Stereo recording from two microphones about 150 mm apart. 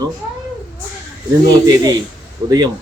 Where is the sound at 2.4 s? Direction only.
25° right (ahead or behind).